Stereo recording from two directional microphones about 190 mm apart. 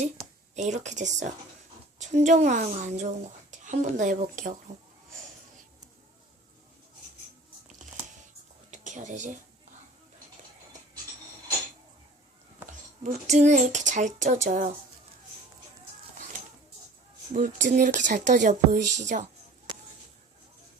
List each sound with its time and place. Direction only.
0.5 s speech: 40° right (ahead or behind)
7.8 s a sound: 40° right (ahead or behind)
8.7 s speech: 40° right (ahead or behind)
13.0 s speech: 40° right (ahead or behind)
17.3 s speech: 45° right (ahead or behind)